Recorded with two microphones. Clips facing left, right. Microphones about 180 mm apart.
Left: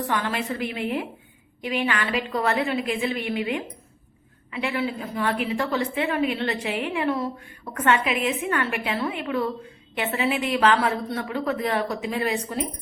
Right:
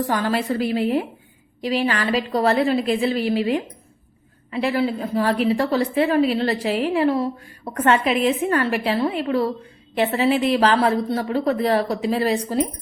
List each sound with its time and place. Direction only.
0.1 s a woman's voice: 35° right (ahead or behind)